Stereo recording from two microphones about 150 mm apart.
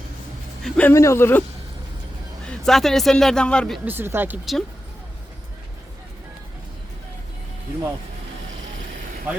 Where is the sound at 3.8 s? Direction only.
15° right (ahead or behind).